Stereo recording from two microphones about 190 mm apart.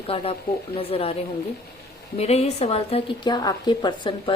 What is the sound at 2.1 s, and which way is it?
A woman's voice, 35° left (ahead or behind).